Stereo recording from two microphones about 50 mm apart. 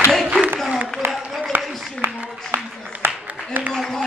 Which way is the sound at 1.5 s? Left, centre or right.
Right.